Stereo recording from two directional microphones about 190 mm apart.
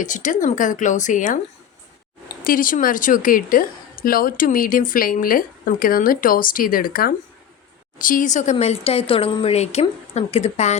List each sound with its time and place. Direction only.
0.0 s a woman's voice: 40° left (ahead or behind)
2.4 s a woman's voice: 45° left (ahead or behind)